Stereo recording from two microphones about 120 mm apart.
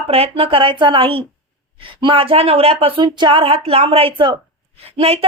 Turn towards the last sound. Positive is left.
turn(degrees=-55)  # may be behind; listen again after turning